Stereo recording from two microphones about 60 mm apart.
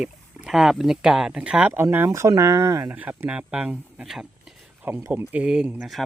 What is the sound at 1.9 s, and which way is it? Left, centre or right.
Speech, right.